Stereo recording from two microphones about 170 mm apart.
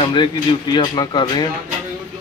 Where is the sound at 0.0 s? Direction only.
25° left (ahead or behind).